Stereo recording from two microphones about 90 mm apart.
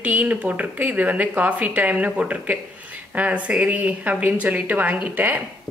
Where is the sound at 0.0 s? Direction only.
15° right (ahead or behind).